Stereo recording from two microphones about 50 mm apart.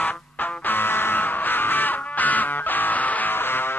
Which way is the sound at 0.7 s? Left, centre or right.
Left.